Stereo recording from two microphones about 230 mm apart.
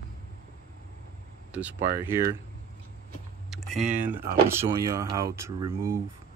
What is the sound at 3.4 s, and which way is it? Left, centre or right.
Speech, centre.